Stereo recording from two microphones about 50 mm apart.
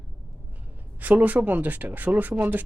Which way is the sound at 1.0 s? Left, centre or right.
Right.